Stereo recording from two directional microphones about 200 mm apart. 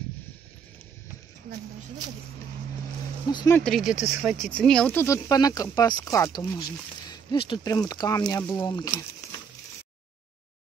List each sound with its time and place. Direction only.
3.3 s speech: 20° left (ahead or behind)
3.5 s speech: centre (ahead or behind); by 8.9 s 20° left (ahead or behind)